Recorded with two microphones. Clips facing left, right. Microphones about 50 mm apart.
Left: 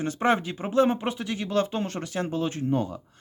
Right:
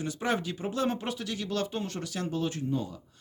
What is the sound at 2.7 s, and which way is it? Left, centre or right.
Speech, left.